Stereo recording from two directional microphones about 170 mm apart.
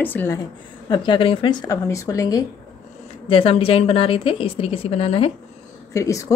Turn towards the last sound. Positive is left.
turn(degrees=20)  # may be behind; listen again after turning